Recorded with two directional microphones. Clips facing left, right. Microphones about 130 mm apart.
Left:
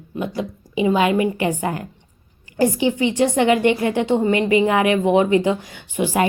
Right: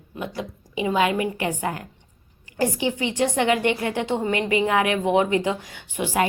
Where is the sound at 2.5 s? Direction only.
10° left (ahead or behind).